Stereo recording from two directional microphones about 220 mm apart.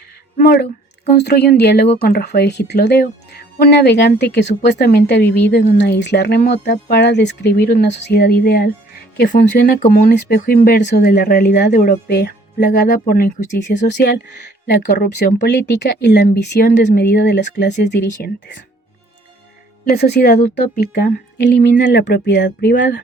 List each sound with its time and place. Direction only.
0.3 s speech: 40° left (ahead or behind)
13.6 s speech: 50° left (ahead or behind)
19.8 s speech: 45° left (ahead or behind)